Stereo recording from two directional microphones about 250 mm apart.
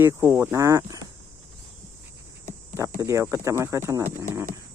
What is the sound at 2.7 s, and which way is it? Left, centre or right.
Speech, centre.